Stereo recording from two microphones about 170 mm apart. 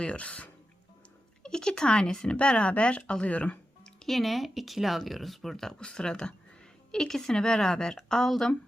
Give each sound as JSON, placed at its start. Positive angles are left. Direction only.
{"t": 0.0, "sound": "speech", "side_deg": 5}